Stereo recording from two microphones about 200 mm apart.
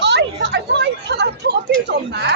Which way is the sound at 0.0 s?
60° right (ahead or behind).